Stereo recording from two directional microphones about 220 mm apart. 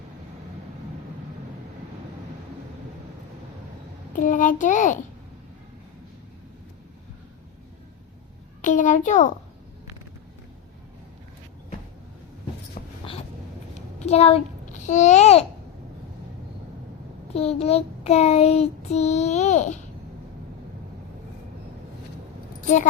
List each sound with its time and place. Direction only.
4.1 s a child's voice: 35° left (ahead or behind)
8.6 s a child's voice: 35° left (ahead or behind)
12.8 s a sound: 35° left (ahead or behind)
14.8 s a child's voice: 35° left (ahead or behind)
17.3 s child singing: 25° left (ahead or behind)